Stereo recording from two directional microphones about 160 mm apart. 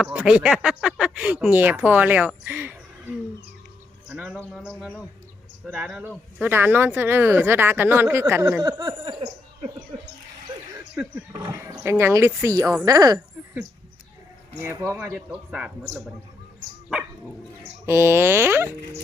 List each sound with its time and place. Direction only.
0.0 s speech: 5° right (ahead or behind)
4.1 s a man's voice: 10° right (ahead or behind); by 9.3 s 25° right (ahead or behind)
11.0 s speech: 20° right (ahead or behind)
14.6 s speech: 15° right (ahead or behind)
15.1 s speech: 5° right (ahead or behind)
17.8 s speech: 15° right (ahead or behind)